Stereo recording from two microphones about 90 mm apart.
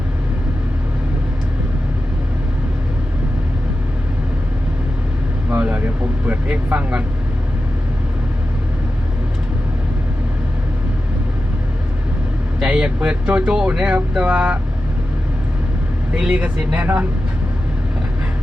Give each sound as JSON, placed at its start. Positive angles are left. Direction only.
{"t": 5.5, "sound": "speech", "side_deg": -15}
{"t": 12.5, "sound": "speech", "side_deg": -10}
{"t": 16.1, "sound": "speech", "side_deg": -15}